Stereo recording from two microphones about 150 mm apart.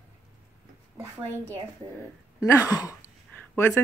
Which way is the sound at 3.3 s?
15° left (ahead or behind).